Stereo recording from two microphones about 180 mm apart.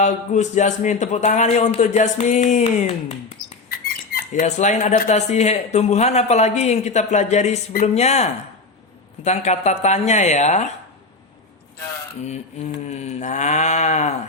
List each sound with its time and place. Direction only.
0.0 s speech: 40° left (ahead or behind)
12.9 s speech: 40° left (ahead or behind)